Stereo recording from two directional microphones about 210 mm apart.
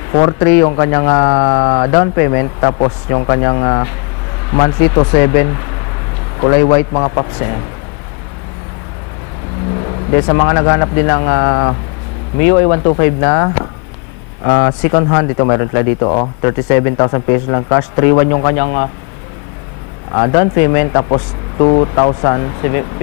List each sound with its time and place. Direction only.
0.2 s speech: 20° left (ahead or behind)
10.1 s speech: 25° left (ahead or behind)
20.2 s speech: 20° left (ahead or behind)